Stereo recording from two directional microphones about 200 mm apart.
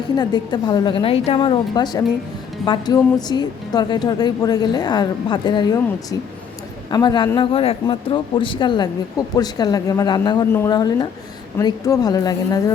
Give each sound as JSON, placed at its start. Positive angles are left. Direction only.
{"t": 0.2, "sound": "speech", "side_deg": 20}